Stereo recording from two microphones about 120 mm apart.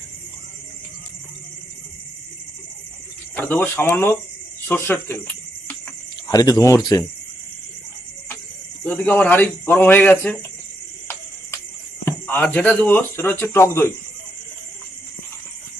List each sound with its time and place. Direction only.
3.3 s speech: 15° left (ahead or behind)
6.2 s speech: 30° left (ahead or behind)
8.8 s speech: 15° left (ahead or behind)
12.0 s speech: 15° left (ahead or behind)